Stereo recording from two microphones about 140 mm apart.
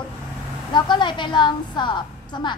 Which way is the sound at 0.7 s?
35° left (ahead or behind).